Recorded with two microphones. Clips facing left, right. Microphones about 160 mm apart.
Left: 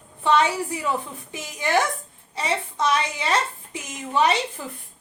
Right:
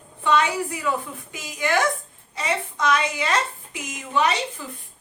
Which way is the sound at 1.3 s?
30° left (ahead or behind).